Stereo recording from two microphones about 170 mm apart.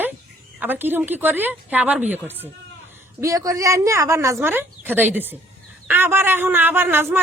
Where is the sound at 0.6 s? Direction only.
10° right (ahead or behind).